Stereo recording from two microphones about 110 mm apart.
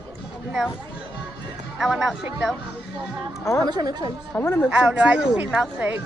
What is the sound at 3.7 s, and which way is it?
Speech, 40° right (ahead or behind).